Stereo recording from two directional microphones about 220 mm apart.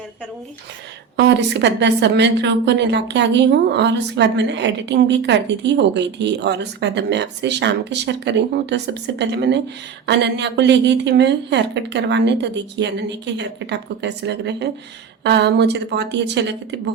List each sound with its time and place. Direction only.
1.1 s a woman's voice: 50° right (ahead or behind)